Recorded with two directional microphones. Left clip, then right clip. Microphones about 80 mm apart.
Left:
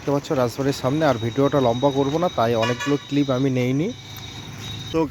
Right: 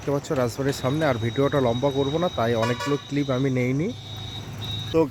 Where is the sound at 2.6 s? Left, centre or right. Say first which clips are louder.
Left 3 dB; centre.